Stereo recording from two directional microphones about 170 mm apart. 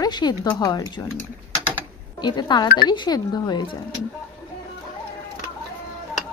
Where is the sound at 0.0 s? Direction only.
25° left (ahead or behind).